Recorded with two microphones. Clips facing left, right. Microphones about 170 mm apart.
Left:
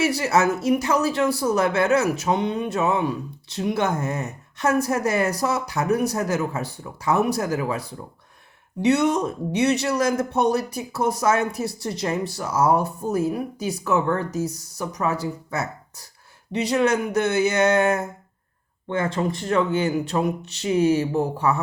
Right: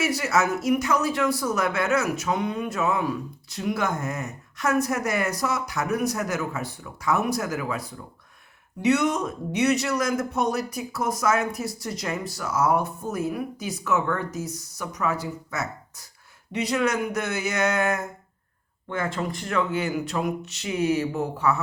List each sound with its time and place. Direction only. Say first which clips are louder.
0.0 s a man's voice: left 4 dB; 30° left (ahead or behind)